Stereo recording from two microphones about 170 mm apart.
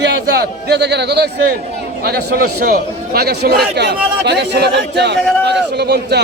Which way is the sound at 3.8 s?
80° right.